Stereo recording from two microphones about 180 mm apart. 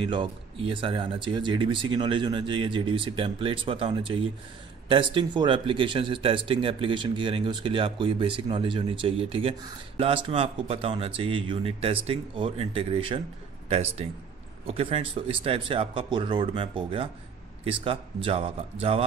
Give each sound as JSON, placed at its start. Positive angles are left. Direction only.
{"t": 0.0, "sound": "speech", "side_deg": -30}